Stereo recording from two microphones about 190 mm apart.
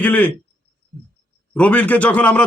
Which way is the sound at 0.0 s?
5° left (ahead or behind).